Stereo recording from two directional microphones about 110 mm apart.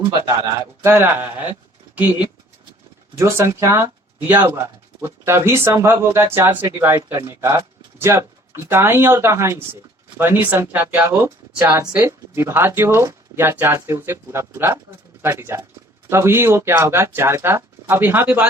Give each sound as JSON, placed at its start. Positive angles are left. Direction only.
{"t": 0.8, "sound": "speech", "side_deg": -20}
{"t": 3.2, "sound": "speech", "side_deg": -25}